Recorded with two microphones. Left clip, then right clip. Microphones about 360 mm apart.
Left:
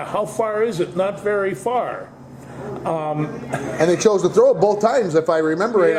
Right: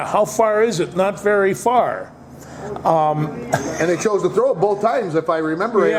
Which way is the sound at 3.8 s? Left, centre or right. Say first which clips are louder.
Left 4 dB; left.